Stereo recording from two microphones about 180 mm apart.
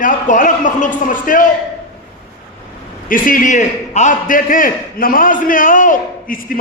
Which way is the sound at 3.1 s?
50° left (ahead or behind).